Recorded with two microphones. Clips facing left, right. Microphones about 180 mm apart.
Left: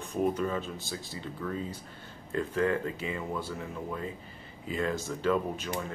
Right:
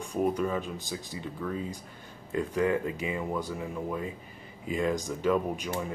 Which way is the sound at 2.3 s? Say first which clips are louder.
Right 1 dB; 15° right (ahead or behind).